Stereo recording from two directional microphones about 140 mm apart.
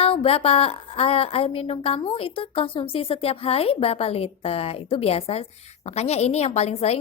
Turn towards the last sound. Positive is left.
turn(degrees=50)  # may be behind; listen again after turning